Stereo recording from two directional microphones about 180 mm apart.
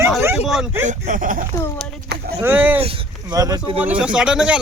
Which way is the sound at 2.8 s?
30° right (ahead or behind).